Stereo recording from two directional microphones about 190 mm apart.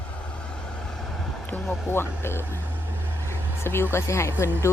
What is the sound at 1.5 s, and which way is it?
Speech, 10° left (ahead or behind).